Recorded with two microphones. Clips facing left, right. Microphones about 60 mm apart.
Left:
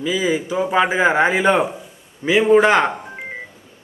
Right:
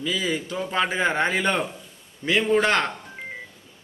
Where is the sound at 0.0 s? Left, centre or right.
Centre.